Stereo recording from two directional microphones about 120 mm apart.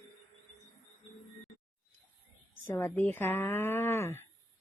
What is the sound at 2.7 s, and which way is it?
Speech, 20° left (ahead or behind).